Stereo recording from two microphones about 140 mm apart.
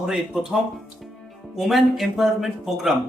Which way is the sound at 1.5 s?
Centre (ahead or behind).